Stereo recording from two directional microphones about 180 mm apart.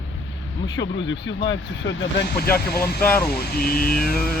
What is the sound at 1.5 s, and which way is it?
Speech, 90° left.